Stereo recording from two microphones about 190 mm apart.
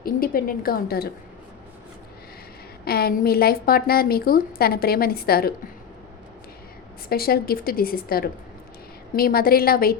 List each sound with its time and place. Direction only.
0.0 s a woman's voice: 50° left (ahead or behind)
2.8 s a woman's voice: 55° left (ahead or behind)
7.1 s a woman's voice: 55° left (ahead or behind)